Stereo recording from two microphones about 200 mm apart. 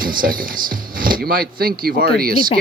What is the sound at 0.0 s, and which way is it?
Speech, 45° right (ahead or behind).